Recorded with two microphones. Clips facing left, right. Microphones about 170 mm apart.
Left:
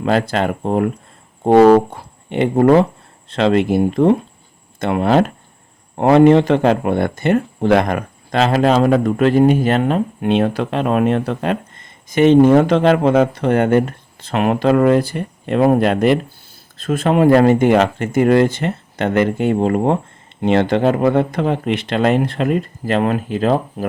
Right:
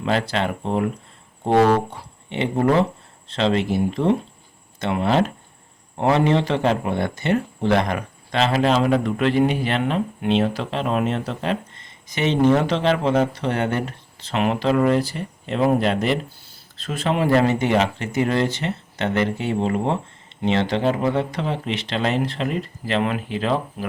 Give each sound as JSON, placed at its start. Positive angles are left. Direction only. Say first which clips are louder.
{"t": 0.0, "sound": "speech", "louder": "left 5 dB", "side_deg": 45}